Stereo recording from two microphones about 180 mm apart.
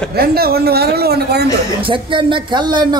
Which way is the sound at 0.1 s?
60° right (ahead or behind).